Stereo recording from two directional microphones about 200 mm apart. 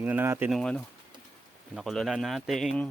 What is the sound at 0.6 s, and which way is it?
Speech, 5° left (ahead or behind).